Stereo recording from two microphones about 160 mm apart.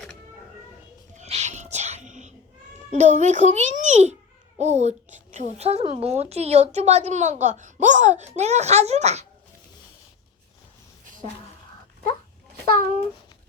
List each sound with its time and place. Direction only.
1.1 s cat: 45° right (ahead or behind)
2.9 s a child's voice: 50° right (ahead or behind)